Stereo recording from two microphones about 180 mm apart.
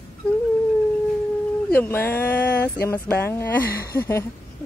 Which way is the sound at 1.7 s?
10° left (ahead or behind).